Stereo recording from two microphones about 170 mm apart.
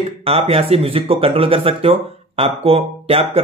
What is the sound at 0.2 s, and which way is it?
Speech, 35° right (ahead or behind).